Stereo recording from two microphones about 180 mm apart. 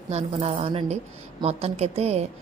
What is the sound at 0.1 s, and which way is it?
A woman's voice, 35° right (ahead or behind).